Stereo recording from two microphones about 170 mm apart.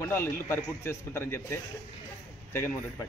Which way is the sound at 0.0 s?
15° left (ahead or behind).